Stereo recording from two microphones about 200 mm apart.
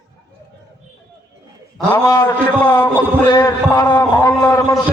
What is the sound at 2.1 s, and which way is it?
Speech, 15° left (ahead or behind).